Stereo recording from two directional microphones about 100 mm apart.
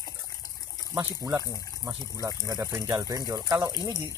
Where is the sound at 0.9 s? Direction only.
40° right (ahead or behind).